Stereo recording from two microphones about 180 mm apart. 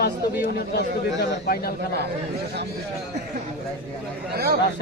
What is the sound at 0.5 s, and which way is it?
A man's voice, 60° left (ahead or behind).